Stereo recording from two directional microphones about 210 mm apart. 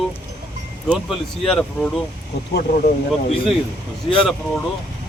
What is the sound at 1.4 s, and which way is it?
Speech, centre (ahead or behind).